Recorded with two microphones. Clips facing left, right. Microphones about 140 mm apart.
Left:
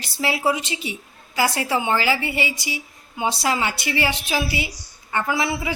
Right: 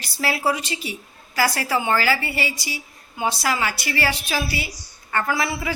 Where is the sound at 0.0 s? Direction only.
20° left (ahead or behind).